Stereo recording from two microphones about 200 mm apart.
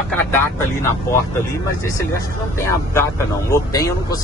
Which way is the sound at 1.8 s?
15° left (ahead or behind).